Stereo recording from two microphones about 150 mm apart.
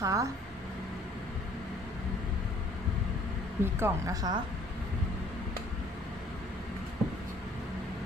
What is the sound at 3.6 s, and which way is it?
Speech, 15° right (ahead or behind).